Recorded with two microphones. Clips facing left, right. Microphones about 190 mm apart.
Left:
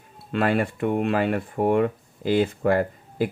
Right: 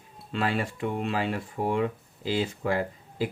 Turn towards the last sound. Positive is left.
turn(degrees=55)  # may be behind; listen again after turning